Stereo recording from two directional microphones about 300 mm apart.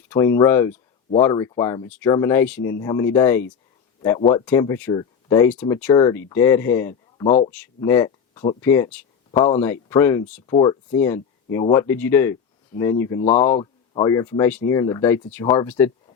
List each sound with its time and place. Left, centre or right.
0.1 s speech: centre
7.3 s speech: left
7.5 s speech: centre
13.2 s speech: left; by 15.9 s centre